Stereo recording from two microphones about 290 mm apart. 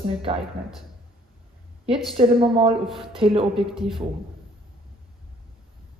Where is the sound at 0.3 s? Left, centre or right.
Centre.